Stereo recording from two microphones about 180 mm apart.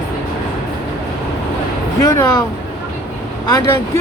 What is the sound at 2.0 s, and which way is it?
Speech, 15° left (ahead or behind).